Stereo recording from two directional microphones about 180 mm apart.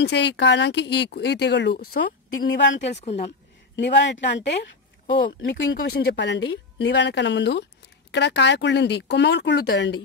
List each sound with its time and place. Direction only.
0.0 s speech: 75° left (ahead or behind)